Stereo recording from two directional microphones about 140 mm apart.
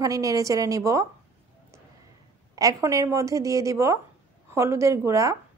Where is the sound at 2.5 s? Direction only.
25° right (ahead or behind).